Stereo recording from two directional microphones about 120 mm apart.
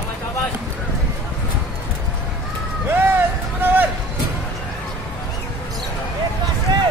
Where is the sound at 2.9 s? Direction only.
15° right (ahead or behind).